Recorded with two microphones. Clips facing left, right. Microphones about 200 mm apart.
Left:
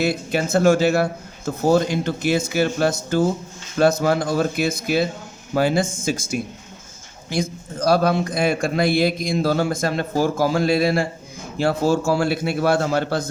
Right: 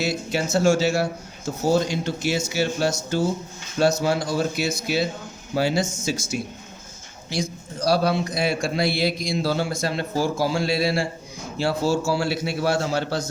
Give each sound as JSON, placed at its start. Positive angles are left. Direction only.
{"t": 0.0, "sound": "a man's voice", "side_deg": 55}